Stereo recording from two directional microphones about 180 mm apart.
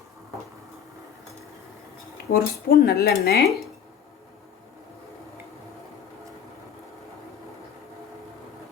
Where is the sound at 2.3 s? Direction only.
55° left (ahead or behind).